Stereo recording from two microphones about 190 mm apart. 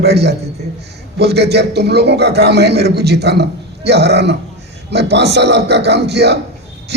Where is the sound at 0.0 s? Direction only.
60° right (ahead or behind).